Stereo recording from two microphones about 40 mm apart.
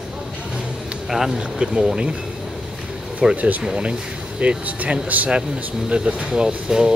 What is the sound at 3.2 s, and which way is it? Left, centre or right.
Speech, centre.